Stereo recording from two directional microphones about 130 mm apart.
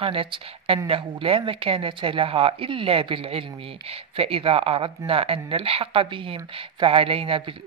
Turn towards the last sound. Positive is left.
turn(degrees=-45)  # may be behind; listen again after turning